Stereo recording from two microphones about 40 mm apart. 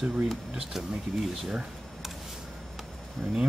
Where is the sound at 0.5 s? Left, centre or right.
Centre.